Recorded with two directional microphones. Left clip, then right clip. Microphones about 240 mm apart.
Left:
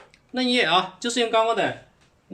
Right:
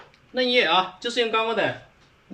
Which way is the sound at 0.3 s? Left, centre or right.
Left.